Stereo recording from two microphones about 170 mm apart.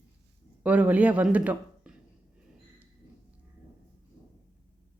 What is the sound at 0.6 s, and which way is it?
Speech, 10° right (ahead or behind).